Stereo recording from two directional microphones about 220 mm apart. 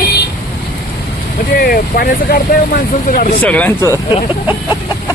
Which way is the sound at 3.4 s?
5° left (ahead or behind).